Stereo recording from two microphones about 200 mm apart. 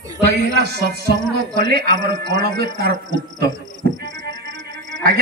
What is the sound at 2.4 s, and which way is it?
Speech, 50° right (ahead or behind).